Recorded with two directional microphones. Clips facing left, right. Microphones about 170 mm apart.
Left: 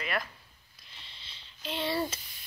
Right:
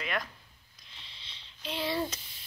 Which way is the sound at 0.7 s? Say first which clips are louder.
Left 1 dB; centre (ahead or behind).